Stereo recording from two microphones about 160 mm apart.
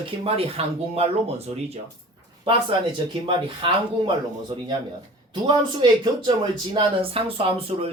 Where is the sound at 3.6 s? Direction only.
30° right (ahead or behind).